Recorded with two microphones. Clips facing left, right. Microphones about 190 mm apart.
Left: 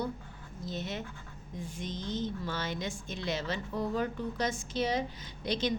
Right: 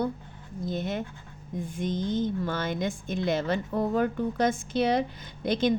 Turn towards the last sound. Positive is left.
turn(degrees=-55)  # may be behind; listen again after turning